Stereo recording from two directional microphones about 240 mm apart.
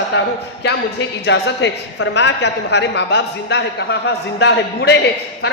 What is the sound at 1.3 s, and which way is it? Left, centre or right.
A woman's voice, left.